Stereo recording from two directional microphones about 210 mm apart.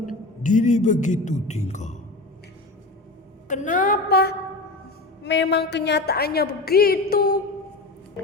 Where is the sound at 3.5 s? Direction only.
35° left (ahead or behind).